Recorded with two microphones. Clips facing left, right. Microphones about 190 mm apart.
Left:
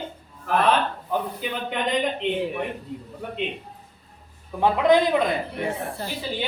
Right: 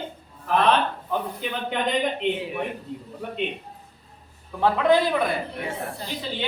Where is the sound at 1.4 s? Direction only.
Centre (ahead or behind).